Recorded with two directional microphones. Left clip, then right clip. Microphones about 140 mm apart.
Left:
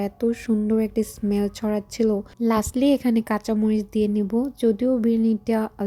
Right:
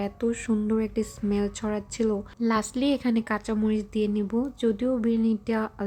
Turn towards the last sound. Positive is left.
turn(degrees=30)  # may be behind; listen again after turning